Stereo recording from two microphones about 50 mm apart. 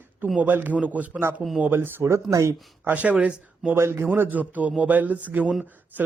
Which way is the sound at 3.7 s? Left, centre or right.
Right.